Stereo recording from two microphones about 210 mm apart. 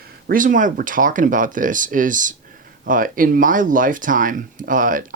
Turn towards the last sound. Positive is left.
turn(degrees=-40)  # may be behind; listen again after turning